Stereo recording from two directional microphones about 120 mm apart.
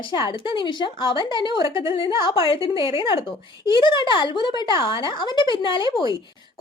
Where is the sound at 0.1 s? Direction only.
40° left (ahead or behind).